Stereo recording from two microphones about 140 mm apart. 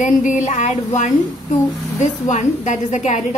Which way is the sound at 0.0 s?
60° left (ahead or behind).